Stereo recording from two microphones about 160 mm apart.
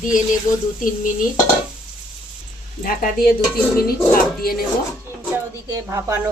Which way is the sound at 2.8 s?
70° left (ahead or behind).